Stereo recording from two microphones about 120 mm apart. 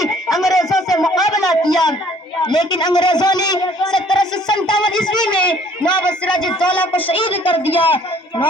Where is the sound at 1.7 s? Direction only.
35° left (ahead or behind).